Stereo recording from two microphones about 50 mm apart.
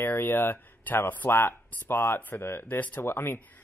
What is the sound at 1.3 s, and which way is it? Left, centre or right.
Speech, left.